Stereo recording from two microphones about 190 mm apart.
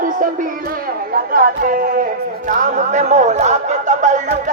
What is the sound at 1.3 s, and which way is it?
Speech, 50° right (ahead or behind).